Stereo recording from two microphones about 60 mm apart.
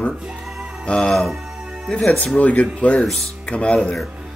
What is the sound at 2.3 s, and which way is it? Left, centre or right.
Speech, left.